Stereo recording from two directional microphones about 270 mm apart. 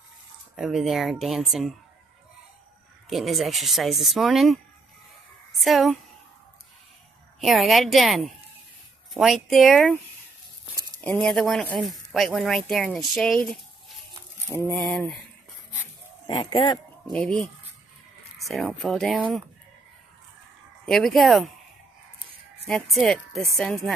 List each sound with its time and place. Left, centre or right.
0.6 s speech: centre
3.1 s speech: centre
5.6 s speech: centre
7.3 s speech: centre
11.1 s speech: centre
16.3 s speech: centre
17.0 s speech: centre
20.8 s speech: centre
22.7 s speech: centre